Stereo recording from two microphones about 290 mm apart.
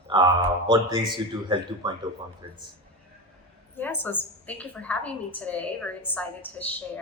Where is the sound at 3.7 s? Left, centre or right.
Centre.